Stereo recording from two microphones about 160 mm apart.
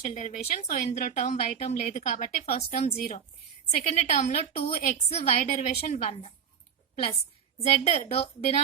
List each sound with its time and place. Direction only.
0.0 s a woman's voice: 50° left (ahead or behind)
7.7 s a woman's voice: 40° left (ahead or behind)